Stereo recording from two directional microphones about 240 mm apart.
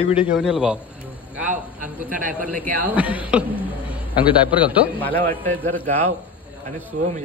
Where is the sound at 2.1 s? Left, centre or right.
Right.